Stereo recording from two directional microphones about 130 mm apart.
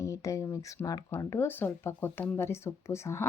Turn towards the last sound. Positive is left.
turn(degrees=20)  # may be behind; listen again after turning